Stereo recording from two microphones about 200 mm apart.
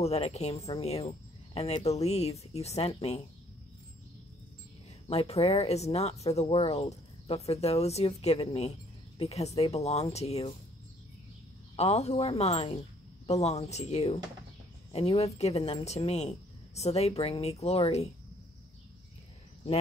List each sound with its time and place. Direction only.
0.0 s speech: 30° left (ahead or behind)
5.0 s speech: 30° left (ahead or behind)
11.7 s speech: 30° left (ahead or behind)